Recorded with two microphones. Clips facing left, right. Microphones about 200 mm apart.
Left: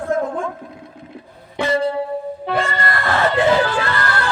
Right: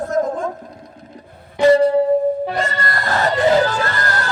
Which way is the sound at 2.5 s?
40° right (ahead or behind).